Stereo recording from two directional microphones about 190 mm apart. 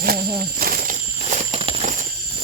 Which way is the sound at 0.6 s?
45° right (ahead or behind).